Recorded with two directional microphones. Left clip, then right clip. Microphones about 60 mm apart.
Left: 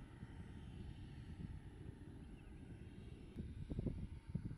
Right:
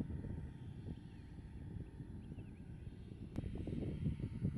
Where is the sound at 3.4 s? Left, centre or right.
Right.